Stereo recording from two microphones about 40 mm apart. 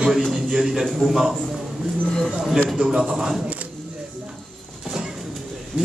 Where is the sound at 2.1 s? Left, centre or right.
Centre.